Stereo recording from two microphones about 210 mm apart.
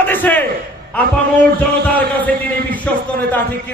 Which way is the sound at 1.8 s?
5° left (ahead or behind).